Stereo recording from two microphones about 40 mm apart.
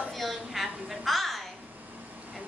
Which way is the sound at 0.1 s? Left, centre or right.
Centre.